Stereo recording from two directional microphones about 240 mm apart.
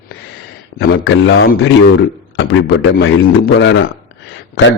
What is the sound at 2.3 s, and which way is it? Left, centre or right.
A man's voice, left.